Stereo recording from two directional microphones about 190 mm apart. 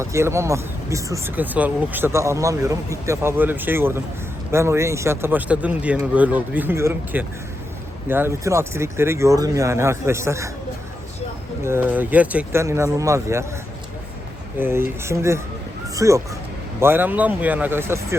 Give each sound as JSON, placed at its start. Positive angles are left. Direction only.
{"t": 0.0, "sound": "speech", "side_deg": -15}
{"t": 11.6, "sound": "speech", "side_deg": -10}
{"t": 14.6, "sound": "speech", "side_deg": -10}